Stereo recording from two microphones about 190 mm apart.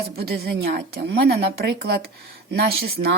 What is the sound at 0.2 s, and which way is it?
A woman's voice, 55° right (ahead or behind).